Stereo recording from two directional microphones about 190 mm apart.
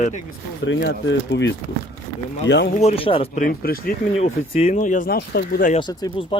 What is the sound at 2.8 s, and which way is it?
Speech, 30° left (ahead or behind).